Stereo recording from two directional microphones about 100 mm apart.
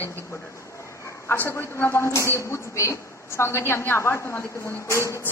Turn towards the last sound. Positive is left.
turn(degrees=30)  # may be behind; listen again after turning